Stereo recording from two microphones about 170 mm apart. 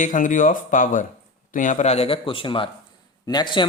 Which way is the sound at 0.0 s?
50° left (ahead or behind).